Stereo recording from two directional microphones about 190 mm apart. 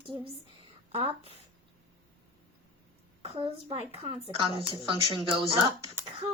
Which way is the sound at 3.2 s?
30° right (ahead or behind).